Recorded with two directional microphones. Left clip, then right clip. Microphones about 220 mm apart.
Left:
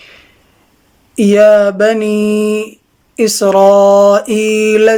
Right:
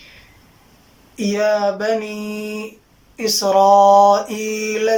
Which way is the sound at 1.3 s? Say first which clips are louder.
Left 10 dB; 45° left (ahead or behind).